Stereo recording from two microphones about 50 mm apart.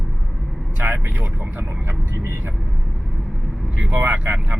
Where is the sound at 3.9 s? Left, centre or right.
Right.